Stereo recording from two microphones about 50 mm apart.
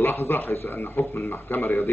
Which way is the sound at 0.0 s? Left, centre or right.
Left.